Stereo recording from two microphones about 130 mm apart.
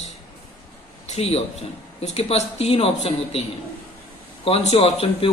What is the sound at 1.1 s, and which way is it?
A man's voice, 55° left (ahead or behind).